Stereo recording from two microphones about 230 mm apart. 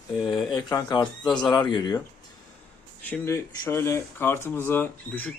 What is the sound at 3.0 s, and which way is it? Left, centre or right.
Speech, centre.